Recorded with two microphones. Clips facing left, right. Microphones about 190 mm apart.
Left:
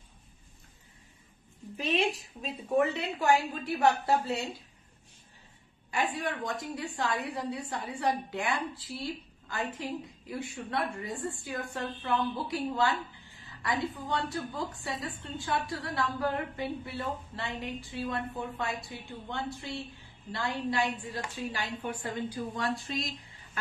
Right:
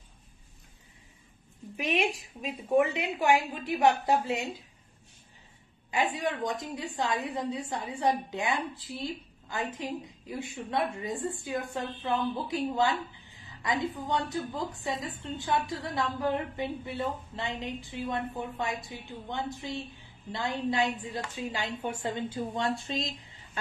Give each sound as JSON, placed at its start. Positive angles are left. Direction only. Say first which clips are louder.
{"t": 1.8, "sound": "a woman's voice", "louder": "even", "side_deg": -15}
{"t": 5.9, "sound": "a woman's voice", "louder": "right 2 dB", "side_deg": -20}